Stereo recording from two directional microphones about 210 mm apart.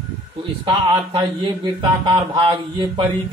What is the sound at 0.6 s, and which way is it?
A man's voice, 20° right (ahead or behind).